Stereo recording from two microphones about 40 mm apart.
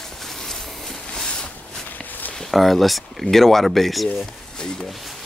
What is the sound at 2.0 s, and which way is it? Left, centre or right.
Walk, left.